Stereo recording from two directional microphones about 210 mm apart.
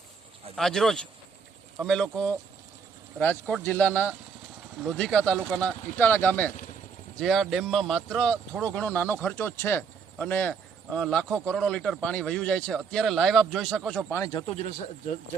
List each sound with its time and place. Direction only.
0.5 s speech: centre (ahead or behind)
14.1 s speech: 15° left (ahead or behind); by 15.2 s 30° left (ahead or behind)